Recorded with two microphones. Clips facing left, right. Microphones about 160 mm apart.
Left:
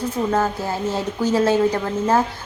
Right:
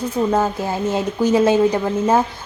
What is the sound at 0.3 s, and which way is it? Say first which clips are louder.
A woman's voice: right 2 dB; 15° right (ahead or behind).